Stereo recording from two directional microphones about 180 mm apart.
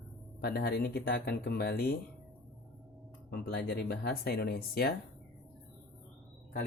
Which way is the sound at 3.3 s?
60° left (ahead or behind).